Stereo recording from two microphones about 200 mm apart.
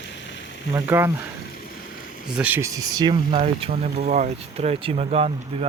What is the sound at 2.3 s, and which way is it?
Speech, 10° right (ahead or behind).